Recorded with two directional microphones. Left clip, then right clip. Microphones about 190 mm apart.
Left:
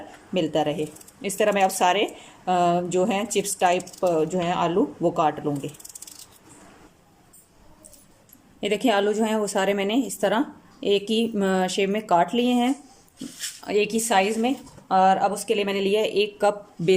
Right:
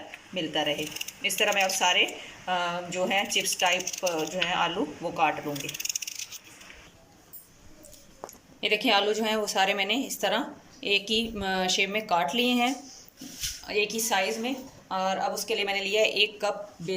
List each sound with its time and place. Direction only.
0.3 s a woman's voice: 50° left (ahead or behind)
8.6 s a woman's voice: 35° left (ahead or behind)